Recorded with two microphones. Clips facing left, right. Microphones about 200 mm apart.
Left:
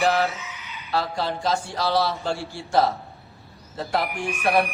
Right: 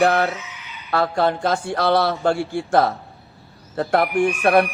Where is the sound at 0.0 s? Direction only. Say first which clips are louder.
Right 4 dB; 60° right (ahead or behind).